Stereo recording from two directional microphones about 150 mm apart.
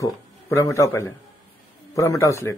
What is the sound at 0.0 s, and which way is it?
A man's voice, 20° left (ahead or behind).